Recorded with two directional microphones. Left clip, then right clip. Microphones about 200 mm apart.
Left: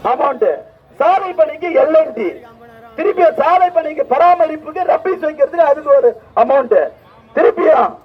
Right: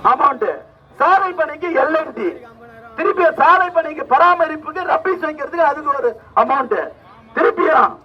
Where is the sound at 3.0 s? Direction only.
10° right (ahead or behind).